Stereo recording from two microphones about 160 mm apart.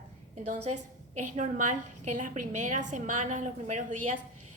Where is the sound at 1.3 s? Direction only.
50° right (ahead or behind).